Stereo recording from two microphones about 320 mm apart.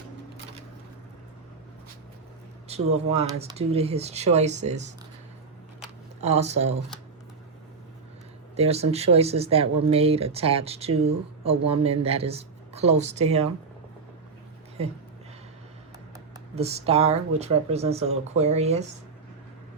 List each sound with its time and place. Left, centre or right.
2.6 s speech: centre
6.2 s speech: centre
8.5 s speech: centre
16.3 s speech: centre